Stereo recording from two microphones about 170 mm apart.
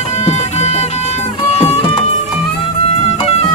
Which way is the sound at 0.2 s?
40° left (ahead or behind).